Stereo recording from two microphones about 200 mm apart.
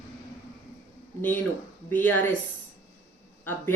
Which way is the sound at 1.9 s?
10° left (ahead or behind).